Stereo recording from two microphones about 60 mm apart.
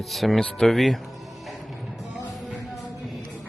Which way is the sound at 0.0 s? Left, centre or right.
Centre.